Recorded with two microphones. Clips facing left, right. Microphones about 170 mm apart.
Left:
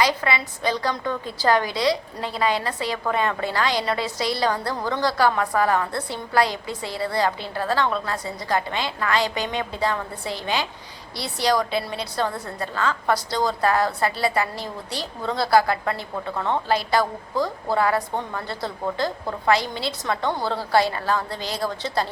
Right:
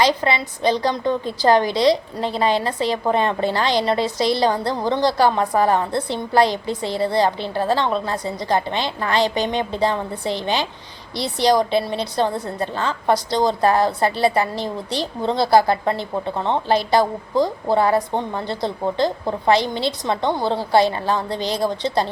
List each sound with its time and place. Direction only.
0.0 s a woman's voice: 25° right (ahead or behind)